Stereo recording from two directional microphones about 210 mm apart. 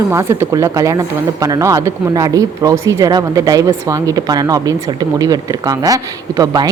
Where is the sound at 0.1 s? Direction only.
10° right (ahead or behind).